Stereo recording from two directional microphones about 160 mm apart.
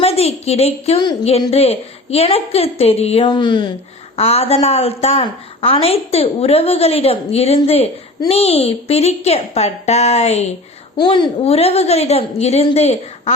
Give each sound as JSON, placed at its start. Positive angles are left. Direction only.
{"t": 0.0, "sound": "a woman's voice", "side_deg": 40}
{"t": 4.2, "sound": "a woman's voice", "side_deg": 40}
{"t": 10.9, "sound": "a woman's voice", "side_deg": 30}